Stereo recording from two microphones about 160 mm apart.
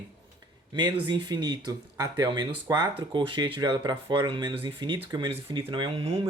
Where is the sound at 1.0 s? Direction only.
30° right (ahead or behind).